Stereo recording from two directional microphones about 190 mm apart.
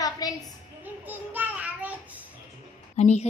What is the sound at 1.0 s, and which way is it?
Child singing, 10° right (ahead or behind).